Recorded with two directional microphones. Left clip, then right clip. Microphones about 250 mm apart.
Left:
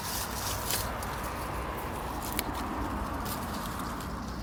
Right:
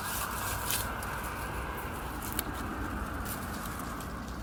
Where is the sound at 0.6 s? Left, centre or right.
Left.